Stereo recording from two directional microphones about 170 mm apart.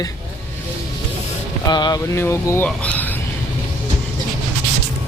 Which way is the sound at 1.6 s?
25° left (ahead or behind).